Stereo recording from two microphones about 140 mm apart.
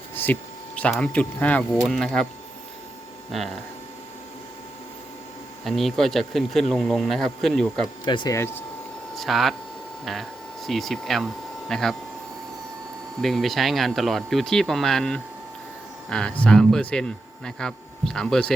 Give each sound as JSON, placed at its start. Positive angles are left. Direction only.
{"t": 0.1, "sound": "a sound", "side_deg": 15}
{"t": 0.8, "sound": "speech", "side_deg": 10}
{"t": 5.6, "sound": "speech", "side_deg": 0}
{"t": 8.0, "sound": "speech", "side_deg": 35}
{"t": 8.4, "sound": "speech", "side_deg": 15}
{"t": 9.1, "sound": "speech", "side_deg": 0}
{"t": 13.2, "sound": "speech", "side_deg": 0}